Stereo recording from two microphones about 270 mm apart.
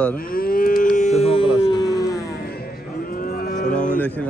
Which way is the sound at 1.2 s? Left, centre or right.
Left.